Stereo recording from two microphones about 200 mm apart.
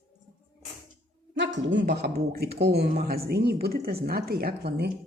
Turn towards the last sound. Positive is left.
turn(degrees=-55)  # may be behind; listen again after turning